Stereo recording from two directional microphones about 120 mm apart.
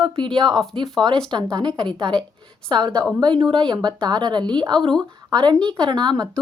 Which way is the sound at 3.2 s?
40° right (ahead or behind).